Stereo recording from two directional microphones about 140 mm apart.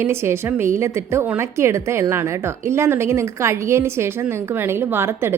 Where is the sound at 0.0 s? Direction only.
15° right (ahead or behind).